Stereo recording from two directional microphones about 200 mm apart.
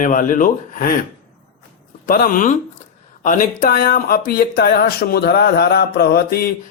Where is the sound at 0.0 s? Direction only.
40° left (ahead or behind).